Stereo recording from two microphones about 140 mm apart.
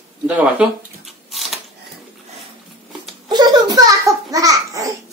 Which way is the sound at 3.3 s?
30° right (ahead or behind).